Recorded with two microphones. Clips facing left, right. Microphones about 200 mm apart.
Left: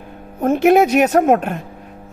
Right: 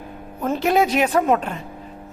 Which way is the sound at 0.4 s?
50° left (ahead or behind).